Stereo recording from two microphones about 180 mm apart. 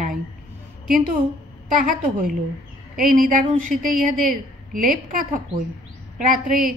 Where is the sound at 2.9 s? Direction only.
50° right (ahead or behind).